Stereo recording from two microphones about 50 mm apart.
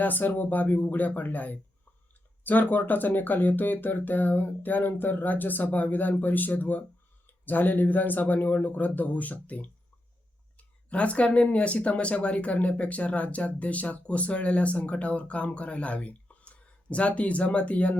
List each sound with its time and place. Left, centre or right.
0.0 s speech: left